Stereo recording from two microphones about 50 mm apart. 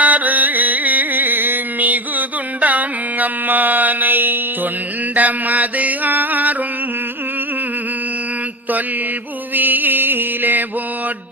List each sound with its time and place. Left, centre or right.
0.0 s music: right
5.1 s mantra: right
9.6 s mantra: right